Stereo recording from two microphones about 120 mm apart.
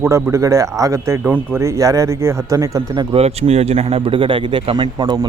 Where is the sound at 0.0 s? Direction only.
25° right (ahead or behind).